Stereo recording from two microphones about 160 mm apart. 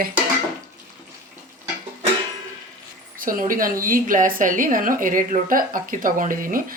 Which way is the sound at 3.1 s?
60° right (ahead or behind).